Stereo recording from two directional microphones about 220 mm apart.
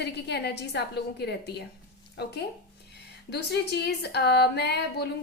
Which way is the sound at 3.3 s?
50° left (ahead or behind).